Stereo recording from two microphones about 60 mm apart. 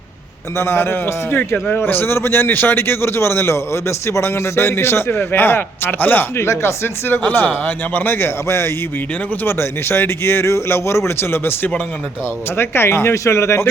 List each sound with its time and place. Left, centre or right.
0.6 s a man's voice: left
6.3 s a man's voice: left